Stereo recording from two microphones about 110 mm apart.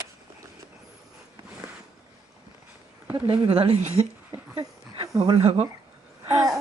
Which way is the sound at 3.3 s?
60° right (ahead or behind).